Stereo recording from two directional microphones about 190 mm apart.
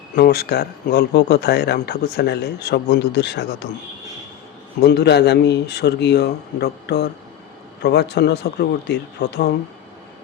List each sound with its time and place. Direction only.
0.2 s speech: 55° left (ahead or behind)
4.8 s speech: 60° left (ahead or behind)